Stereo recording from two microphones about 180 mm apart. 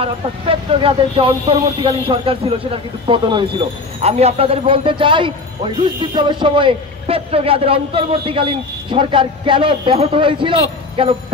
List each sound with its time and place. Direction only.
0.0 s speech: 30° right (ahead or behind)